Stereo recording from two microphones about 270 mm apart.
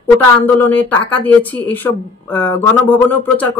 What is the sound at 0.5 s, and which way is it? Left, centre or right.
Speech, centre.